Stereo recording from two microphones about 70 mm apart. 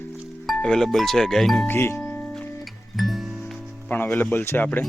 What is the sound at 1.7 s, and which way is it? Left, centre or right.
Speech, left.